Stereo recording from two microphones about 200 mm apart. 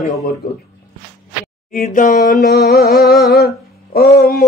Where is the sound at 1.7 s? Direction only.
40° left (ahead or behind).